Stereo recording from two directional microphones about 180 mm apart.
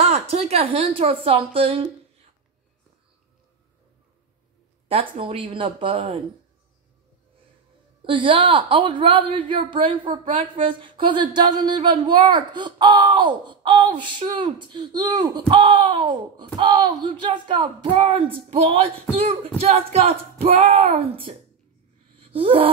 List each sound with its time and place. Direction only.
0.0 s speech: 35° right (ahead or behind)
4.8 s a woman's voice: 30° right (ahead or behind)
8.0 s a woman's voice: 30° right (ahead or behind)
22.2 s a sound: 30° right (ahead or behind)